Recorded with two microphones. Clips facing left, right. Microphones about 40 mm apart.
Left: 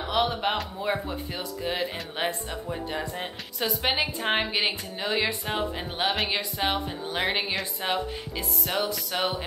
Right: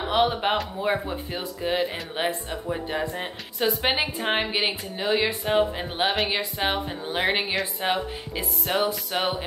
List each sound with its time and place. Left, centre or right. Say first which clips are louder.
0.0 s speech: right 3 dB; right
6.1 s speech: right 2 dB; centre
8.4 s music: right 4 dB; right